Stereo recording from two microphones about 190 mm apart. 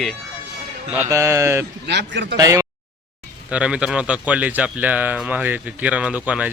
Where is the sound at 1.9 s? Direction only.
65° right (ahead or behind).